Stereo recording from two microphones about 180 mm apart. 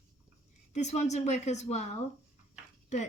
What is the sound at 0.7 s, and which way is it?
A woman's voice, 40° left (ahead or behind).